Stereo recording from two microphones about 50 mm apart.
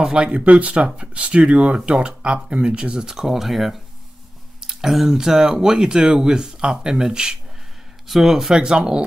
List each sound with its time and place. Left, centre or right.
0.0 s speech: right